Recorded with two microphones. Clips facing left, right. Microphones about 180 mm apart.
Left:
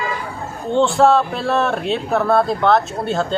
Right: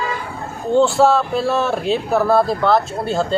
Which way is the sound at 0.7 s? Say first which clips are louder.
Even; centre (ahead or behind).